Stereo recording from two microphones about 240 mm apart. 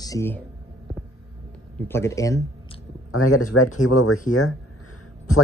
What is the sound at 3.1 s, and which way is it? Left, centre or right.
Speech, left.